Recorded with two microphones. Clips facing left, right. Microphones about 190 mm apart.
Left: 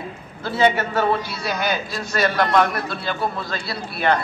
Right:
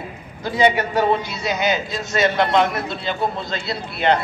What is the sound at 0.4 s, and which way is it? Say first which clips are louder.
A man's voice: right 1 dB; 15° right (ahead or behind).